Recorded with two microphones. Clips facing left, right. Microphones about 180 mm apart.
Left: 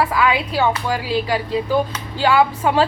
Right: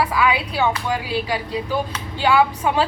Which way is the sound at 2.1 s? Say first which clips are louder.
Left 1 dB; 40° left (ahead or behind).